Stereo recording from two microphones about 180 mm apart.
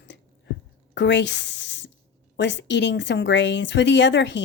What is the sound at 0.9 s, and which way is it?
Speech, 80° left.